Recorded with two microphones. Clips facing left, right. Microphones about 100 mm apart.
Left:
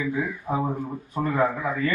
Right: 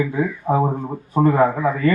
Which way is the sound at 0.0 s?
40° right (ahead or behind).